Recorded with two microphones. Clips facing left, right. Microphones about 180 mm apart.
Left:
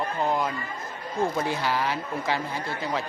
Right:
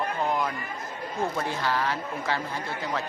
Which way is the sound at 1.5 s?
10° left (ahead or behind).